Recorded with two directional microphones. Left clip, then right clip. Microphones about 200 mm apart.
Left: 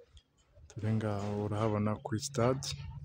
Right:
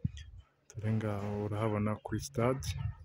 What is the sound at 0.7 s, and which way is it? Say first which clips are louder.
Speech: left 1 dB; centre (ahead or behind).